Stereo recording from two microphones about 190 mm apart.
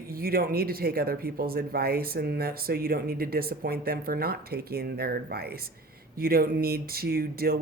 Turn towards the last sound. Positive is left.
turn(degrees=-55)  # may be behind; listen again after turning